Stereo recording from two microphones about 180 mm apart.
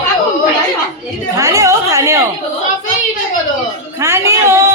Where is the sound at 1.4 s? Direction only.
15° right (ahead or behind).